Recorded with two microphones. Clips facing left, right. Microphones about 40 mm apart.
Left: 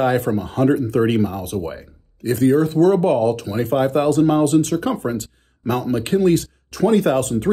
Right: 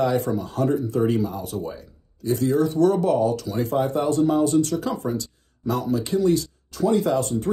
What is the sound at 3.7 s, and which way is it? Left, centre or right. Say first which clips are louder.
Speech: left 6 dB; left.